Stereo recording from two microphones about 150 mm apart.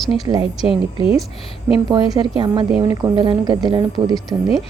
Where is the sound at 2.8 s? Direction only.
20° right (ahead or behind).